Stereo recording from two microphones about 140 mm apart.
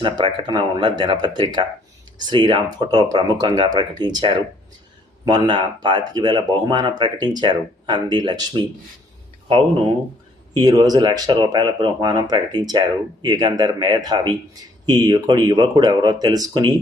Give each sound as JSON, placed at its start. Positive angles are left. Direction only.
{"t": 0.0, "sound": "speech", "side_deg": -30}
{"t": 10.5, "sound": "speech", "side_deg": -30}